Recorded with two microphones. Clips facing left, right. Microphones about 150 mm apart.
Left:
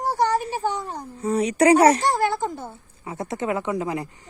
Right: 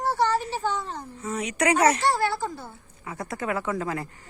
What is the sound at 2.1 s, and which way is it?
Speech, 20° left (ahead or behind).